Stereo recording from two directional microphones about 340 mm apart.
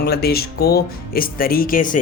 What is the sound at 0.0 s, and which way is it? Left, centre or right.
Speech, left.